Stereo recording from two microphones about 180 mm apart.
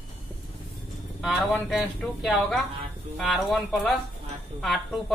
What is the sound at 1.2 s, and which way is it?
Speech, centre (ahead or behind).